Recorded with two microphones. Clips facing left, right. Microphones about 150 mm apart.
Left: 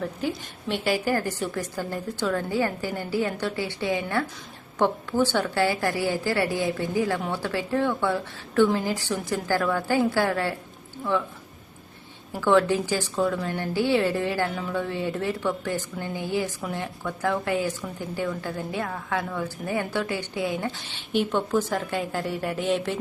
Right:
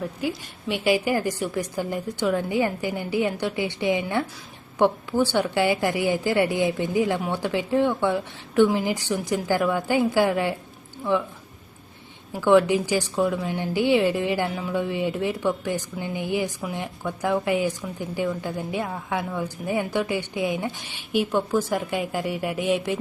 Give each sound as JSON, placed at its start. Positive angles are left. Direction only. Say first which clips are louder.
{"t": 0.0, "sound": "a woman's voice", "louder": "right 1 dB", "side_deg": -10}
{"t": 12.3, "sound": "a woman's voice", "louder": "right 3 dB", "side_deg": -15}